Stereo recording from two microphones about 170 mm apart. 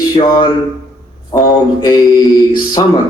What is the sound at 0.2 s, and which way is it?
A man's voice, 20° left (ahead or behind).